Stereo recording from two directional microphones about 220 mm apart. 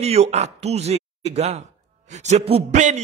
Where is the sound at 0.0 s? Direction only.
30° right (ahead or behind).